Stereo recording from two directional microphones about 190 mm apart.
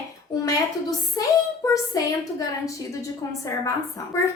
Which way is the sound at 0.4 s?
15° left (ahead or behind).